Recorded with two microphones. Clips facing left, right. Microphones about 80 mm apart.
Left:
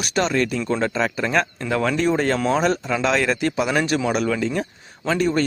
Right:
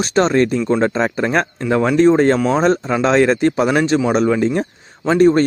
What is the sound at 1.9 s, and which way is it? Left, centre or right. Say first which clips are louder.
Speech: right 12 dB; right.